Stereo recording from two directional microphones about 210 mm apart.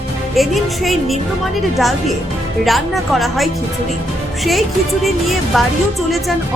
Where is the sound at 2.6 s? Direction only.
Centre (ahead or behind).